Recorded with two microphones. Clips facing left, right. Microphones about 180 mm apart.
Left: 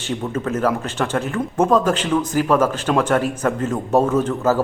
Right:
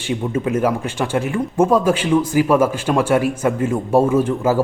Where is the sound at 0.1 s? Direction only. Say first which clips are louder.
Right 3 dB; 10° right (ahead or behind).